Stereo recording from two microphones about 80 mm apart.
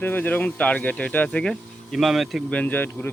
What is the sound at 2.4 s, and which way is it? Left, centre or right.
Speech, centre.